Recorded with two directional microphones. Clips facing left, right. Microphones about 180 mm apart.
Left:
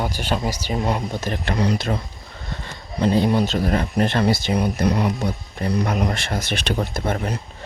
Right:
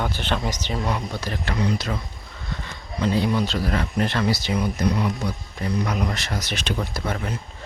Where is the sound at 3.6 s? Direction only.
45° left (ahead or behind).